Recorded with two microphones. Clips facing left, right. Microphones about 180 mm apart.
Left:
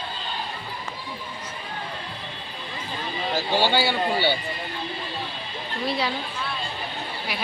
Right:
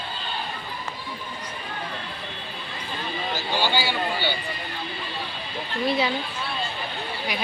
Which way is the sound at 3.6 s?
65° left (ahead or behind).